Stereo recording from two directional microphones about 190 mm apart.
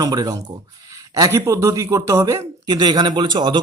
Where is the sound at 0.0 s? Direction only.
20° right (ahead or behind).